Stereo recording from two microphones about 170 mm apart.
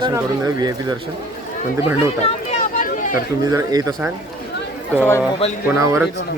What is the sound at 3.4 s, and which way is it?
Speech, 20° right (ahead or behind).